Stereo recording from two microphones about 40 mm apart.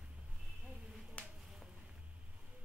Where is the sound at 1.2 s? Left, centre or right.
Left.